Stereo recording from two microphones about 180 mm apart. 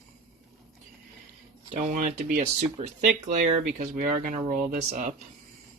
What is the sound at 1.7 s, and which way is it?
Speech, 45° right (ahead or behind).